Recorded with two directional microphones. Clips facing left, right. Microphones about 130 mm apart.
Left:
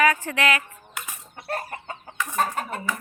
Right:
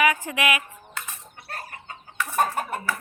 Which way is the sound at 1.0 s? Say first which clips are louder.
Even; 15° left (ahead or behind).